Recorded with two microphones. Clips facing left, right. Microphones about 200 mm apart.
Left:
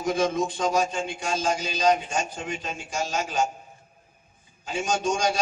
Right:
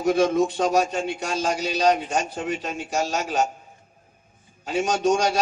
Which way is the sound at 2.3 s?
60° right (ahead or behind).